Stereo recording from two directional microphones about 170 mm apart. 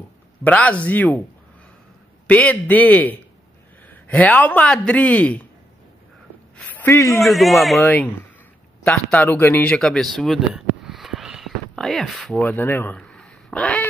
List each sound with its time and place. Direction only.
0.4 s speech: 10° left (ahead or behind)
2.2 s speech: 10° left (ahead or behind)
6.5 s a sound: 10° left (ahead or behind)
7.2 s a man's voice: centre (ahead or behind)